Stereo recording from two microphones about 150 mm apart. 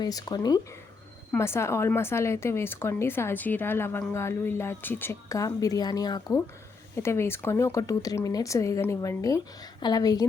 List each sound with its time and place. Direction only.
0.0 s a woman's voice: 25° left (ahead or behind)